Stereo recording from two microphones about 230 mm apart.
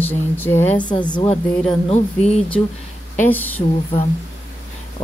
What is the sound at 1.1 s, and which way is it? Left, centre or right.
Speech, left.